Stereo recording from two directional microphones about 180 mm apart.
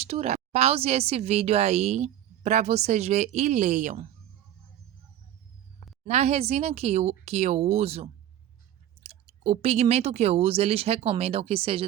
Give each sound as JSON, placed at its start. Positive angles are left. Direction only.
{"t": 0.1, "sound": "a woman's voice", "side_deg": -40}
{"t": 6.1, "sound": "a woman's voice", "side_deg": -35}